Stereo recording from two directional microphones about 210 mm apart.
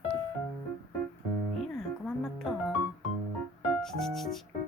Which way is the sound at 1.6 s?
Centre (ahead or behind).